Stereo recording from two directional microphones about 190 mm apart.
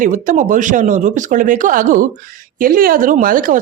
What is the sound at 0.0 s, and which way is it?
Speech, 45° right (ahead or behind).